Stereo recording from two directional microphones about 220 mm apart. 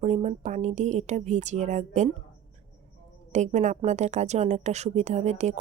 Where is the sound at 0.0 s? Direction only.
30° right (ahead or behind).